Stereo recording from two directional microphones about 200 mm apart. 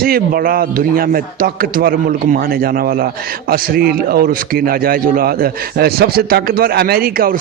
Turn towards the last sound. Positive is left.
turn(degrees=-45)  # may be behind; listen again after turning